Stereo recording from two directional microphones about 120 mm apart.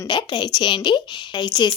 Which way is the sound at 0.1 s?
40° left (ahead or behind).